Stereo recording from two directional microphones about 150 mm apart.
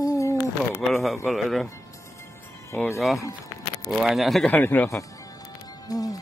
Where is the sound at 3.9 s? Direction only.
Centre (ahead or behind).